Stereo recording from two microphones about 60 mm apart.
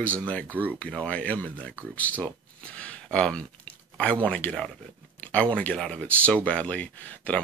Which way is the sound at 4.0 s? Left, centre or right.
Centre.